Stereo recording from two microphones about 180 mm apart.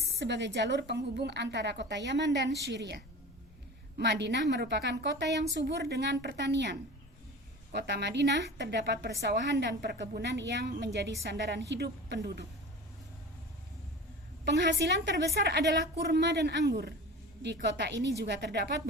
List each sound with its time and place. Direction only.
0.2 s a woman's voice: 75° right (ahead or behind)
14.4 s a woman's voice: 70° right (ahead or behind)